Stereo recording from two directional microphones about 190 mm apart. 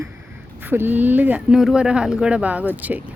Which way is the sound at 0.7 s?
10° right (ahead or behind).